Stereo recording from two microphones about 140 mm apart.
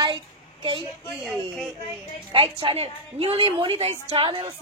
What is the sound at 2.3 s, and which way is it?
A woman's voice, 35° right (ahead or behind).